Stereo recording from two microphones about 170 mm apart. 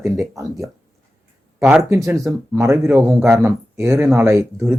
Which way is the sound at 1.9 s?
15° right (ahead or behind).